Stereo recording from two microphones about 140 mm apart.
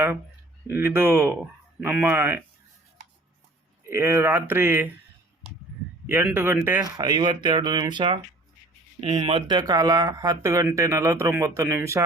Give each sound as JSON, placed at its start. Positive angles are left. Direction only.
{"t": 0.7, "sound": "speech", "side_deg": -15}
{"t": 3.8, "sound": "speech", "side_deg": -15}
{"t": 6.1, "sound": "speech", "side_deg": -15}
{"t": 6.9, "sound": "speech", "side_deg": -30}